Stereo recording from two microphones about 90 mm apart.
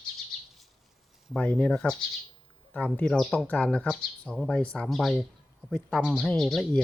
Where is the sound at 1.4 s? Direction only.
15° left (ahead or behind).